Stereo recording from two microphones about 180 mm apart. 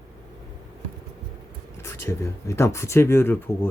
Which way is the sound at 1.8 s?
15° left (ahead or behind).